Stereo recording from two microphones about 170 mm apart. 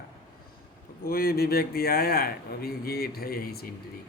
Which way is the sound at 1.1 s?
60° left (ahead or behind).